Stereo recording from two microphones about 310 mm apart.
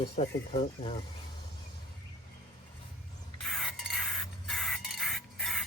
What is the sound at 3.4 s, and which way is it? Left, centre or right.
Stir, centre.